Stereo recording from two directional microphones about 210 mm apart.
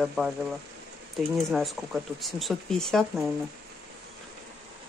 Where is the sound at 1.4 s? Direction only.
Centre (ahead or behind).